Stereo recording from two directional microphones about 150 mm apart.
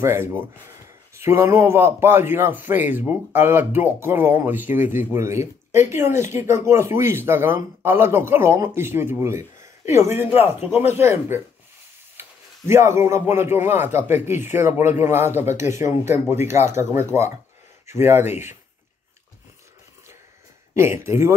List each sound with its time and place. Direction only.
0.0 s speech: 15° right (ahead or behind)
20.7 s speech: 15° right (ahead or behind)